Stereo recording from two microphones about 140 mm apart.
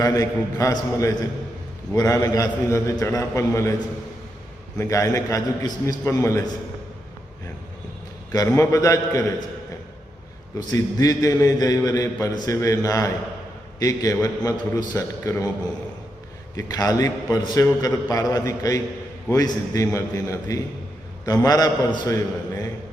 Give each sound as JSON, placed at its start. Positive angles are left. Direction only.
{"t": 0.0, "sound": "a man's voice", "side_deg": 25}
{"t": 4.8, "sound": "a man's voice", "side_deg": 25}
{"t": 8.3, "sound": "a man's voice", "side_deg": 25}
{"t": 10.7, "sound": "a man's voice", "side_deg": 30}